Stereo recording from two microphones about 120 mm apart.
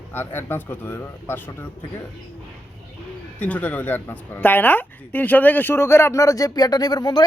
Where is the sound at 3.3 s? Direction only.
15° left (ahead or behind).